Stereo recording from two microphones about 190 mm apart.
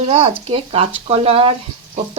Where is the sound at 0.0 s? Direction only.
35° right (ahead or behind).